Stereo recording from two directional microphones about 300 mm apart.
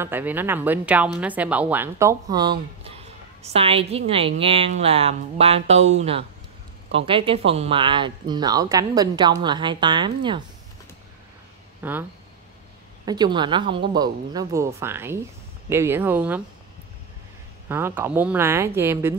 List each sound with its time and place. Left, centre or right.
0.0 s speech: centre
2.8 s a sound: centre
3.5 s a woman's voice: centre
11.8 s speech: centre
17.6 s speech: centre